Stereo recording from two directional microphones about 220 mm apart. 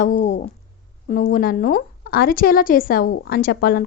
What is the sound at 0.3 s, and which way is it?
A woman's voice, 35° left (ahead or behind).